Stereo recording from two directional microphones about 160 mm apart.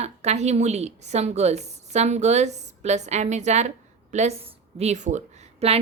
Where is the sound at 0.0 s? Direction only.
45° right (ahead or behind).